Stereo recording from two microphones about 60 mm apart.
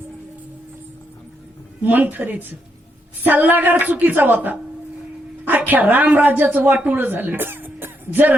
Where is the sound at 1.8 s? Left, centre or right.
Right.